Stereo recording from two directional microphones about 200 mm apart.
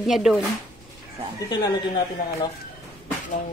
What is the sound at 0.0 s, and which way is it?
Speech, centre (ahead or behind).